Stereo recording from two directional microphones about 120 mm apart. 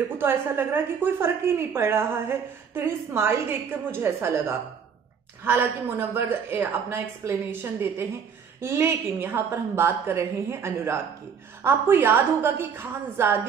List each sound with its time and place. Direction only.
0.2 s a woman's voice: 20° right (ahead or behind)
8.5 s a woman's voice: 20° right (ahead or behind)